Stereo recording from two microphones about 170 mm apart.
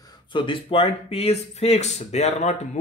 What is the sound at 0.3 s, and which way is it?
Speech, 30° left (ahead or behind).